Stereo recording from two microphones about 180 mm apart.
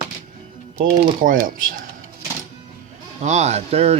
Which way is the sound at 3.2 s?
40° right (ahead or behind).